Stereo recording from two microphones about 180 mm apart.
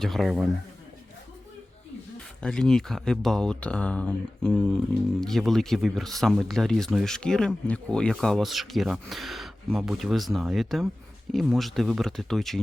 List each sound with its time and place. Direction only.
0.0 s speech: centre (ahead or behind)
2.4 s speech: 5° left (ahead or behind)